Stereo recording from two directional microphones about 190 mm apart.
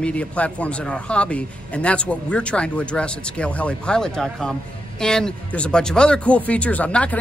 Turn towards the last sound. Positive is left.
turn(degrees=5)  # may be behind; listen again after turning